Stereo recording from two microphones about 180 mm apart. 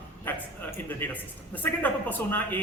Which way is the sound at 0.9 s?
10° left (ahead or behind).